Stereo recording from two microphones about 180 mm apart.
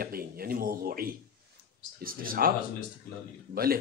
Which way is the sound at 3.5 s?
55° right (ahead or behind).